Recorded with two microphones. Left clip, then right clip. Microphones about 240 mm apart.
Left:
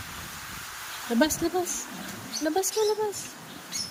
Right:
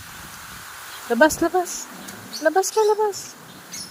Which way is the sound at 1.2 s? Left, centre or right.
Right.